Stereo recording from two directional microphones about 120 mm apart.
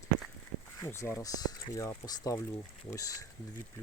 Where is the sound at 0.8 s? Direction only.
20° left (ahead or behind).